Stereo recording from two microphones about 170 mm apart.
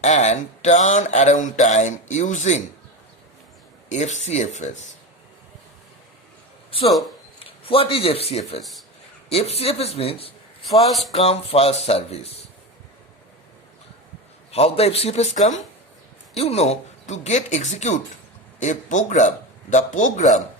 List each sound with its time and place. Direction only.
0.0 s speech: 45° left (ahead or behind)
3.8 s speech: 45° left (ahead or behind)
7.3 s speech: 35° left (ahead or behind)
14.5 s speech: 35° left (ahead or behind)